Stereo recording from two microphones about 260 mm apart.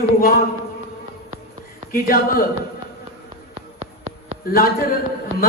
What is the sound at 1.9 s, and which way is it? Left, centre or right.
Speech, left.